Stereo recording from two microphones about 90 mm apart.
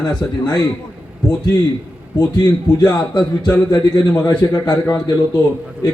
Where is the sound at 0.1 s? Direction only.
50° left (ahead or behind).